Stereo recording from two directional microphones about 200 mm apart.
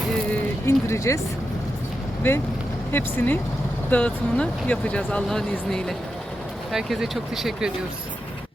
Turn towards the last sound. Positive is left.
turn(degrees=0)  # may be behind; listen again after turning